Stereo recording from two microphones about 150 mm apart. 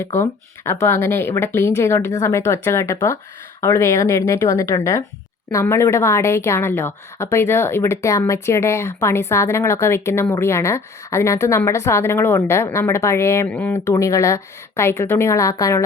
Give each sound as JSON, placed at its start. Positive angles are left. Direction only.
{"t": 0.0, "sound": "a woman's voice", "side_deg": 15}